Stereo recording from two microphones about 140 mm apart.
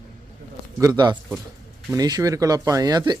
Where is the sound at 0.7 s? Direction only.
25° right (ahead or behind).